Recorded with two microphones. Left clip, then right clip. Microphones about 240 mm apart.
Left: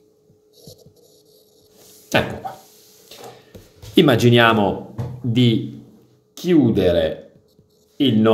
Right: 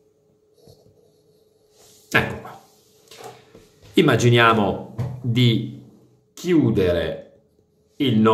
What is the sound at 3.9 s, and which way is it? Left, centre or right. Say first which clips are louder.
Speech: left 3 dB; centre.